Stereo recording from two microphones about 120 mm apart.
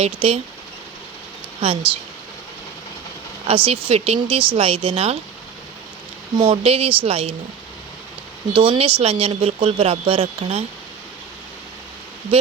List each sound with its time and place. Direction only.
0.0 s speech: 50° right (ahead or behind)
1.6 s speech: 55° right (ahead or behind)
3.4 s speech: 50° right (ahead or behind)
6.4 s speech: 50° right (ahead or behind)
8.5 s speech: 50° right (ahead or behind)